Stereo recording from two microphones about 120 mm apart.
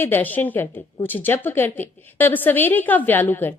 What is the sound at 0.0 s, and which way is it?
A woman's voice, 15° left (ahead or behind).